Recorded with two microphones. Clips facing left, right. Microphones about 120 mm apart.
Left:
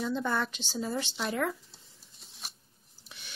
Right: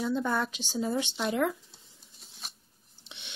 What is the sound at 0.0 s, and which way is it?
A woman's voice, 5° right (ahead or behind).